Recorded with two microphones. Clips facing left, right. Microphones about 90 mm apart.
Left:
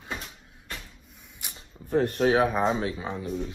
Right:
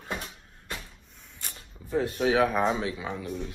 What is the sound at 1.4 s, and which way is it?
Camera, 15° left (ahead or behind).